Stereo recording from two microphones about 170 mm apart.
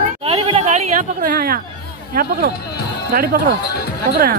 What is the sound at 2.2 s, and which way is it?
Speech, 60° right (ahead or behind).